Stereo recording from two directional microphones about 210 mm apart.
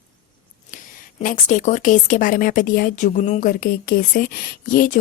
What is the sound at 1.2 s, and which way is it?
A woman's voice, 40° left (ahead or behind).